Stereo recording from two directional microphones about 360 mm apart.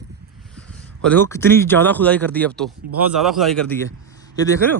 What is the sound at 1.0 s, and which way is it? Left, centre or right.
Speech, centre.